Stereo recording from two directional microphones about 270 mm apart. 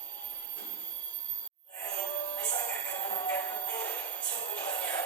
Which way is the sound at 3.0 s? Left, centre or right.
Centre.